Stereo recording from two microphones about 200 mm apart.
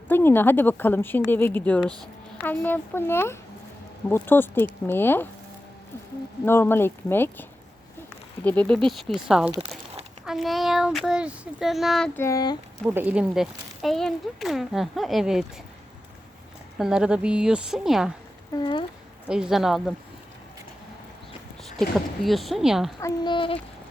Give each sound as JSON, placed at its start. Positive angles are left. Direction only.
{"t": 0.1, "sound": "a woman's voice", "side_deg": 10}
{"t": 6.4, "sound": "a woman's voice", "side_deg": 10}
{"t": 8.4, "sound": "speech", "side_deg": 5}
{"t": 9.6, "sound": "crumpling", "side_deg": -30}
{"t": 10.2, "sound": "speech", "side_deg": 0}
{"t": 12.9, "sound": "speech", "side_deg": -10}
{"t": 16.7, "sound": "speech", "side_deg": -5}
{"t": 18.5, "sound": "a woman's voice", "side_deg": 20}
{"t": 19.3, "sound": "speech", "side_deg": -5}
{"t": 21.6, "sound": "speech", "side_deg": 0}
{"t": 23.0, "sound": "a woman's voice", "side_deg": 20}